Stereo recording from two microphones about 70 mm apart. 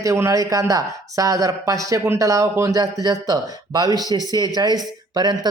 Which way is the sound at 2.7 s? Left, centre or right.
Right.